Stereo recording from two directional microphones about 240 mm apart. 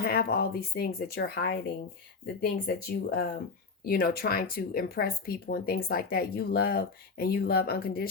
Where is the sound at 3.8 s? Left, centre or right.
Left.